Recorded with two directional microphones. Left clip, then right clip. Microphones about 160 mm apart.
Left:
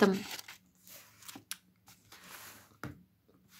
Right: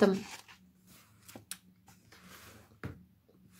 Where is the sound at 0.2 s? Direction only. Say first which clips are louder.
Left 3 dB; 50° left (ahead or behind).